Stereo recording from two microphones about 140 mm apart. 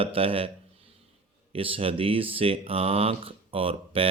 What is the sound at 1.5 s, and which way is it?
Speech, 40° right (ahead or behind).